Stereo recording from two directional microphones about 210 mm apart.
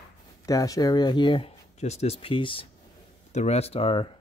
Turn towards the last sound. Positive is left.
turn(degrees=25)  # may be behind; listen again after turning